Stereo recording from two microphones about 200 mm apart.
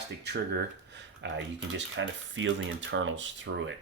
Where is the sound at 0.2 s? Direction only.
55° right (ahead or behind).